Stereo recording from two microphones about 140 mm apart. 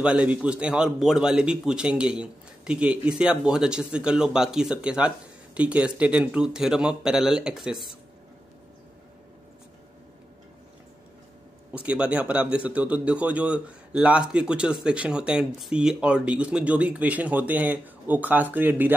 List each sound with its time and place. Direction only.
0.0 s a man's voice: 10° right (ahead or behind)
11.7 s a man's voice: 10° right (ahead or behind)